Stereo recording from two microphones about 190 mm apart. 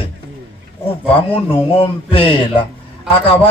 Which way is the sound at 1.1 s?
30° left (ahead or behind).